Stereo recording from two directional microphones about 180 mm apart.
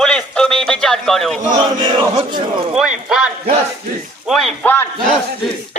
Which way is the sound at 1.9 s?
25° right (ahead or behind).